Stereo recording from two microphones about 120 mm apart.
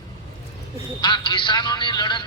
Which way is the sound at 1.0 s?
40° left (ahead or behind).